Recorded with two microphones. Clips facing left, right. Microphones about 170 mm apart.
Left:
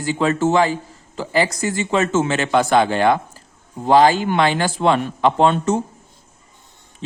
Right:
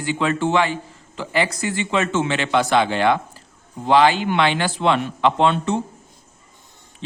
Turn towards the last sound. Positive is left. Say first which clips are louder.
# left 2 dB
turn(degrees=45)  # may be behind; listen again after turning